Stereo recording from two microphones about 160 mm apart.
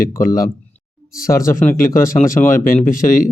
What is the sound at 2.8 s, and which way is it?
Speech, 60° left (ahead or behind).